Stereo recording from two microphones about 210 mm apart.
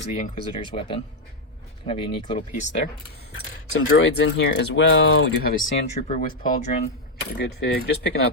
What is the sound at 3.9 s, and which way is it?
Speech, 65° left (ahead or behind).